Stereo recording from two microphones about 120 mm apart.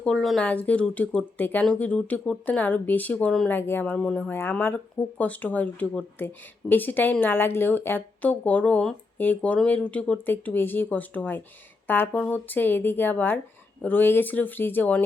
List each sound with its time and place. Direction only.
0.0 s speech: 5° left (ahead or behind)